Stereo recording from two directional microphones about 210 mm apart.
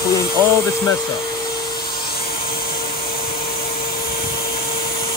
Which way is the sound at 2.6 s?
25° left (ahead or behind).